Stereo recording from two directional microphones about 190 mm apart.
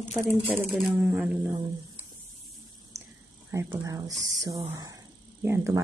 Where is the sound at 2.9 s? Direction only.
15° right (ahead or behind).